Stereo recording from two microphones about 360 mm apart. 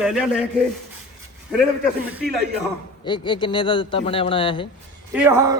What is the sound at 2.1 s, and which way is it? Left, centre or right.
Speech, centre.